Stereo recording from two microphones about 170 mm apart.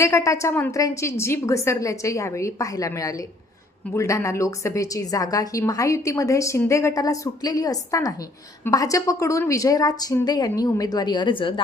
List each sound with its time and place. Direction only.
0.0 s a woman's voice: 15° left (ahead or behind)